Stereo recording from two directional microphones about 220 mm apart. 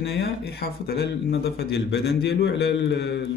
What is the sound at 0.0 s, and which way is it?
A man's voice, 45° left (ahead or behind).